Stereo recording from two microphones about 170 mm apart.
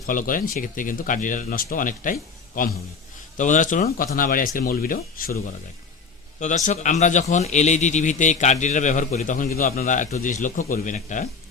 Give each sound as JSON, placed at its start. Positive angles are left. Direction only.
{"t": 0.1, "sound": "a man's voice", "side_deg": 55}
{"t": 3.3, "sound": "speech", "side_deg": 50}
{"t": 6.4, "sound": "a man's voice", "side_deg": 45}